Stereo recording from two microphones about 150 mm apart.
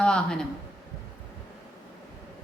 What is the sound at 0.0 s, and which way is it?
Speech, 5° left (ahead or behind).